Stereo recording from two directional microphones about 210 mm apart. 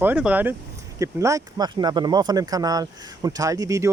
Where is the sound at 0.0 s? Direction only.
5° right (ahead or behind).